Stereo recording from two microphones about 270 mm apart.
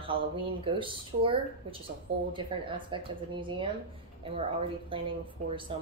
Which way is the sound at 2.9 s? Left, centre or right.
Centre.